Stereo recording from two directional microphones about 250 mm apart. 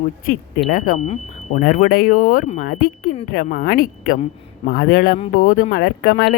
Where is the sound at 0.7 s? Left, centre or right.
Left.